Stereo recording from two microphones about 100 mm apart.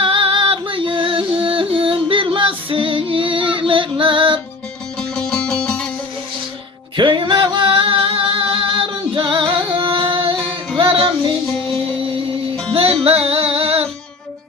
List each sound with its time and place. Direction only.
0.0 s music: 60° right (ahead or behind)
4.9 s music: 5° left (ahead or behind)
6.9 s music: 50° right (ahead or behind)
12.7 s music: 70° right (ahead or behind)
13.1 s music: 85° right